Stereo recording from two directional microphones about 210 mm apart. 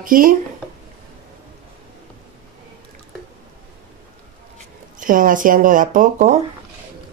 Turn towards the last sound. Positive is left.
turn(degrees=-35)  # may be behind; listen again after turning